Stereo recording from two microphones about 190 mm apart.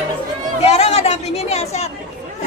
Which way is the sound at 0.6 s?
35° left (ahead or behind).